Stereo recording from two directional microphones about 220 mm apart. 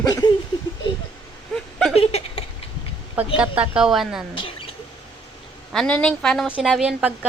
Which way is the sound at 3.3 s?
5° right (ahead or behind).